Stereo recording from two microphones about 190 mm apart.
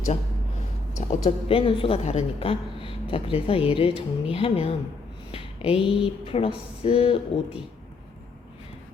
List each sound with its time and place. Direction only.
0.9 s a woman's voice: 40° left (ahead or behind)